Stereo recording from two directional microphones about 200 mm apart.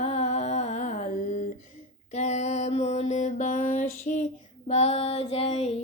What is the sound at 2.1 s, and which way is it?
Mantra, 35° left (ahead or behind).